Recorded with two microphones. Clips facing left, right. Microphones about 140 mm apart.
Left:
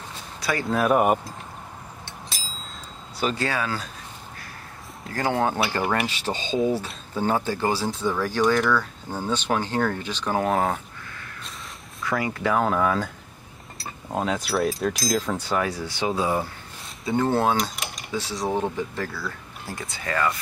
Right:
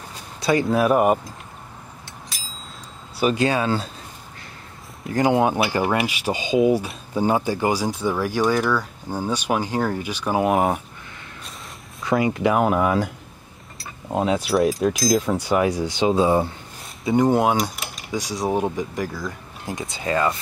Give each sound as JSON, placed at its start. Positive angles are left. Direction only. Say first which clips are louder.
{"t": 0.4, "sound": "speech", "louder": "right 7 dB", "side_deg": -25}
{"t": 0.7, "sound": "speech", "louder": "even", "side_deg": 0}
{"t": 3.2, "sound": "speech", "louder": "right 6 dB", "side_deg": -15}
{"t": 5.0, "sound": "speech", "louder": "right 5 dB", "side_deg": -15}
{"t": 14.1, "sound": "speech", "louder": "right 5 dB", "side_deg": -10}
{"t": 17.0, "sound": "speech", "louder": "right 4 dB", "side_deg": -15}